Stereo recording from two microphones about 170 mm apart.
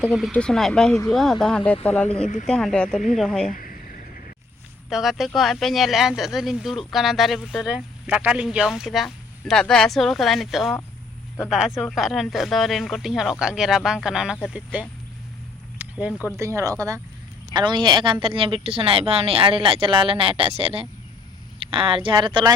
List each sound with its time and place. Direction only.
0.0 s speech: 5° right (ahead or behind)
3.5 s a sound: 50° left (ahead or behind)
4.9 s speech: centre (ahead or behind); by 22.5 s 30° right (ahead or behind)